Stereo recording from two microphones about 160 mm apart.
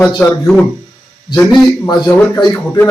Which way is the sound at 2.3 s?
20° left (ahead or behind).